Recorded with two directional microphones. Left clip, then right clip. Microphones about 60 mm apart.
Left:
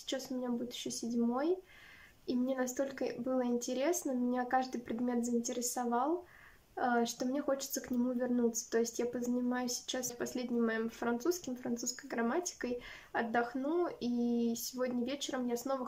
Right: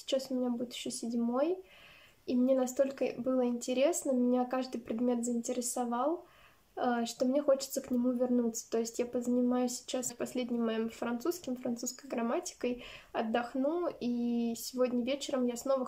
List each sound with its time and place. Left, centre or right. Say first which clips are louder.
0.1 s speech: right 5 dB; right